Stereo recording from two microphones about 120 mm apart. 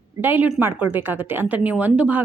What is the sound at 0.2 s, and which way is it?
A woman's voice, 15° right (ahead or behind).